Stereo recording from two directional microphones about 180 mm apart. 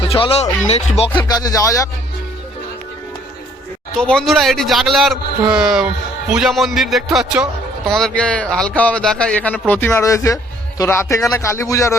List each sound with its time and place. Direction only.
0.0 s speech: 30° left (ahead or behind)
1.2 s speech: 20° left (ahead or behind)
3.9 s a man's voice: 5° left (ahead or behind)